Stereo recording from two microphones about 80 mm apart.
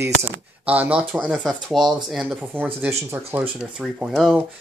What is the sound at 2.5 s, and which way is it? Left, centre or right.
Speech, right.